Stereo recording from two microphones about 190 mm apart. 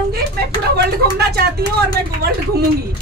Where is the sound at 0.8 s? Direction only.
55° right (ahead or behind).